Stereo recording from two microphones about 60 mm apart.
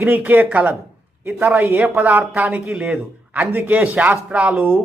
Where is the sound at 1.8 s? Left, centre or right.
Right.